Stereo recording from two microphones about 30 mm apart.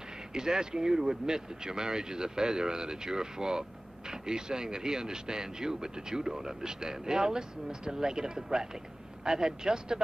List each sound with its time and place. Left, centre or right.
0.3 s speech: right